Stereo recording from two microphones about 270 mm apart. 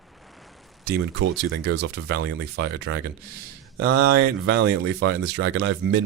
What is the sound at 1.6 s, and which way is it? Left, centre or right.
Speech, right.